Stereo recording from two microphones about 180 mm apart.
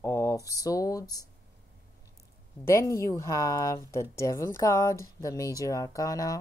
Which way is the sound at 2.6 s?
15° left (ahead or behind).